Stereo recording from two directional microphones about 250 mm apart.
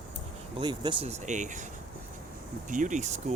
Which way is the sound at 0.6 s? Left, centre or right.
Centre.